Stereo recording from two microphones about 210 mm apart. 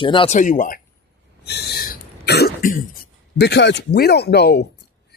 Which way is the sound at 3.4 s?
55° left (ahead or behind).